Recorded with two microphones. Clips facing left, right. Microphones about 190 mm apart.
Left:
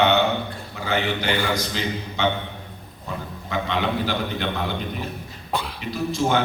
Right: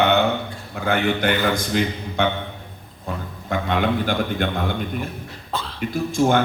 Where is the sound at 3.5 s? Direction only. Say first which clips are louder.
Right 3 dB; 50° right (ahead or behind).